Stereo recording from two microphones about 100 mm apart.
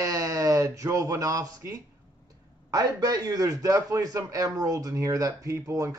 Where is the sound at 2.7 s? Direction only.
40° right (ahead or behind).